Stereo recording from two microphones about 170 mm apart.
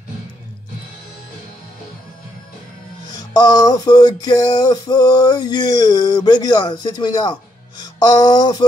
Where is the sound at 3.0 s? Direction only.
25° left (ahead or behind).